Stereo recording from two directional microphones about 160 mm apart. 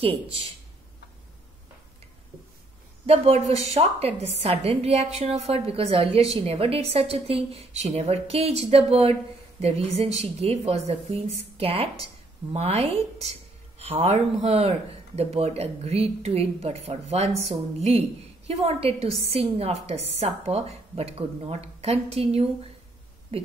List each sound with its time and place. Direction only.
3.1 s a woman's voice: 40° right (ahead or behind)